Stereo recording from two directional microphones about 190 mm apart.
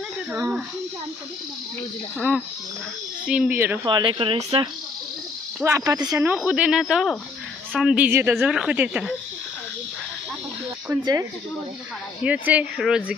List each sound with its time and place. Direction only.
0.3 s speech: 5° right (ahead or behind)
2.1 s a woman's voice: 5° right (ahead or behind)
3.8 s speech: 25° right (ahead or behind)
5.6 s a woman's voice: 15° right (ahead or behind)
10.9 s speech: 15° right (ahead or behind)